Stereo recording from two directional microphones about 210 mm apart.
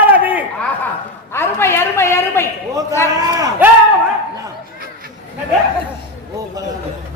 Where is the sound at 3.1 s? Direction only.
15° right (ahead or behind).